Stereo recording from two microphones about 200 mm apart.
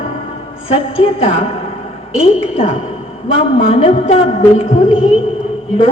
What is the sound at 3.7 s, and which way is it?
A woman's voice, 30° left (ahead or behind).